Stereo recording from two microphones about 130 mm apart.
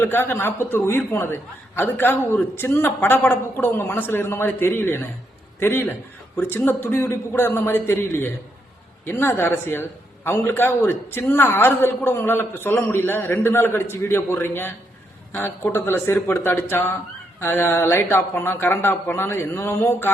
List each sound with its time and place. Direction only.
0.0 s a man's voice: 15° left (ahead or behind)